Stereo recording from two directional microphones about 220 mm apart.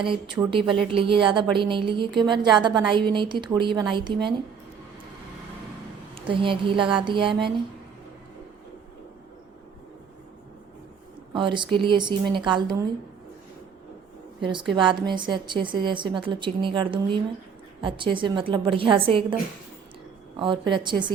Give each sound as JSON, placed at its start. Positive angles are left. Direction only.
{"t": 0.0, "sound": "a woman's voice", "side_deg": -25}
{"t": 6.1, "sound": "a woman's voice", "side_deg": -25}
{"t": 11.3, "sound": "a woman's voice", "side_deg": -20}
{"t": 14.8, "sound": "a woman's voice", "side_deg": -20}
{"t": 20.3, "sound": "a woman's voice", "side_deg": -20}